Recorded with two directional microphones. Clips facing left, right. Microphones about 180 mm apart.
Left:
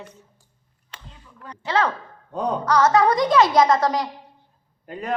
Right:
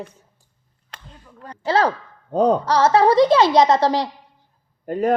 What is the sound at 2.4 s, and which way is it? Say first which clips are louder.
Speech: right 2 dB; 30° right (ahead or behind).